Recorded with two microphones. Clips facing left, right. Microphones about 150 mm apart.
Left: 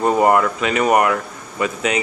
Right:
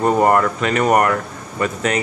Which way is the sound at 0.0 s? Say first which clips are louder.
Even; 10° left (ahead or behind).